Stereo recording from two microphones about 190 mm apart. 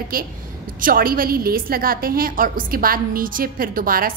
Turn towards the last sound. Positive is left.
turn(degrees=-50)  # may be behind; listen again after turning